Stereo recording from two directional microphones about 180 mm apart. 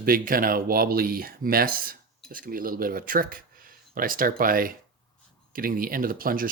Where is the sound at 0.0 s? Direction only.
55° right (ahead or behind).